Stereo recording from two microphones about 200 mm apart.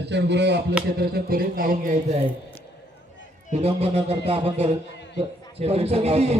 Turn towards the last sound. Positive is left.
turn(degrees=-30)  # may be behind; listen again after turning